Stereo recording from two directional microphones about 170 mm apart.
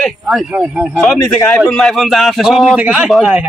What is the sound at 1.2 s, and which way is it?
Speech, 15° left (ahead or behind).